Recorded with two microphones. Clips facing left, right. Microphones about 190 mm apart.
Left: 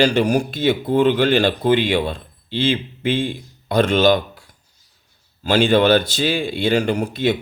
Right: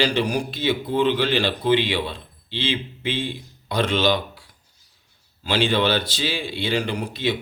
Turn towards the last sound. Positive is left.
turn(degrees=50)  # may be behind; listen again after turning